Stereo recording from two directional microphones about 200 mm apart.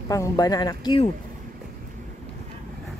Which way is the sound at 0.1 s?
15° left (ahead or behind).